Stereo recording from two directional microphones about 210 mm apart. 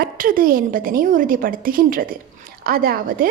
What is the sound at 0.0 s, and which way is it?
A woman's voice, 40° right (ahead or behind).